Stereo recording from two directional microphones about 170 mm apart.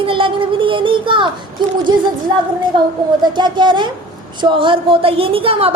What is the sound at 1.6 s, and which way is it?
Speech, 25° right (ahead or behind).